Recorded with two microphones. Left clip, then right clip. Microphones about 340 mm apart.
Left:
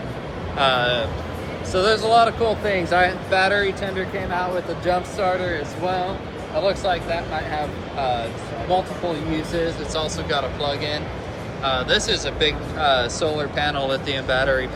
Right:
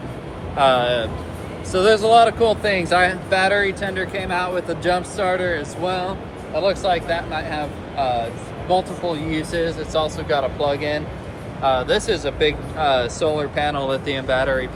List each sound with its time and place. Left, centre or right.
0.5 s speech: right
6.6 s speech: right